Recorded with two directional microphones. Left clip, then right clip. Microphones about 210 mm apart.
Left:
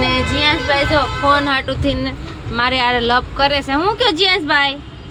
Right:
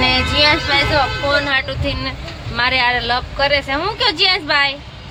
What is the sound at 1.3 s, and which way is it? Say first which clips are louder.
Speech: left 2 dB; 15° left (ahead or behind).